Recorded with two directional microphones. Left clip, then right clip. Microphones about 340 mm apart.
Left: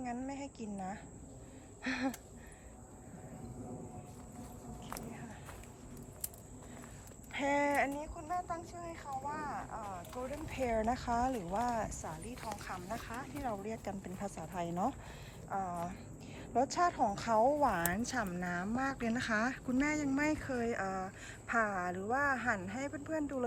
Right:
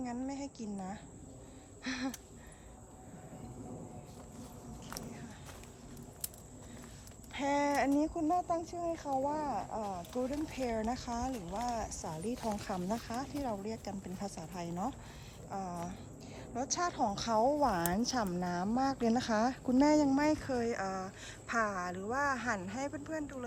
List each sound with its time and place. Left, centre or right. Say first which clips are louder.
0.0 s a sound: right 1 dB; centre
1.8 s a woman's voice: left 2 dB; centre
4.9 s walk: even; centre
7.3 s a woman's voice: even; centre